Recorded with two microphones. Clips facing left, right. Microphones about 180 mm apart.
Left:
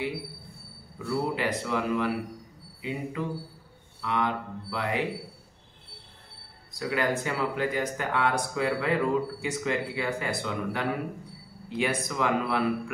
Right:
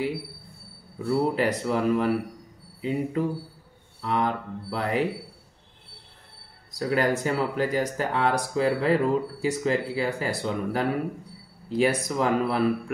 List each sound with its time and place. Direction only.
1.0 s speech: 40° right (ahead or behind)
6.8 s speech: 40° right (ahead or behind)